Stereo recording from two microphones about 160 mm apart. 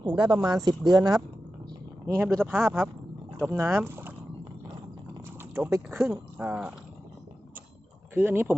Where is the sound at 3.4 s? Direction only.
15° right (ahead or behind).